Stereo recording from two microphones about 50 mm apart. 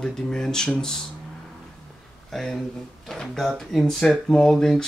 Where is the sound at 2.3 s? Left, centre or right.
Centre.